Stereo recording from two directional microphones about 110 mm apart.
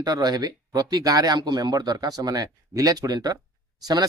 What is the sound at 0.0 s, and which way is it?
Speech, 35° right (ahead or behind).